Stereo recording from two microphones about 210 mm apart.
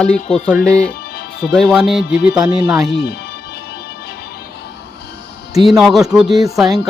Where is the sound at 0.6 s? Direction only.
5° left (ahead or behind).